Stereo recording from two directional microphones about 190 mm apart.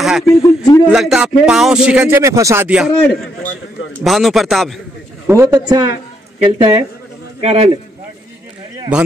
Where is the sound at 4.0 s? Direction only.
Centre (ahead or behind).